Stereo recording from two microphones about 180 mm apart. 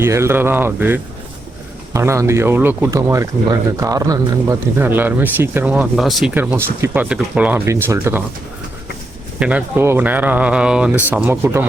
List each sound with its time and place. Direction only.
0.0 s speech: 15° right (ahead or behind)
9.4 s speech: 10° right (ahead or behind)